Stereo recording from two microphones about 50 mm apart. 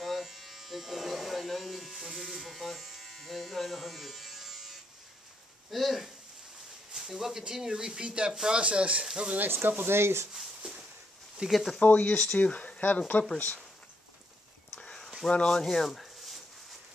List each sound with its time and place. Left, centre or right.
0.0 s electric shaver: centre
5.7 s a sound: centre
6.9 s speech: centre
9.4 s speech: right
9.9 s speech: right
10.6 s a sound: centre
11.4 s speech: centre
11.8 s speech: left
14.8 s a sound: centre
15.5 s speech: centre